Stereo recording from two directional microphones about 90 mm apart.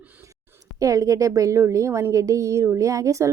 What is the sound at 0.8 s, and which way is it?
A woman's voice, 40° right (ahead or behind).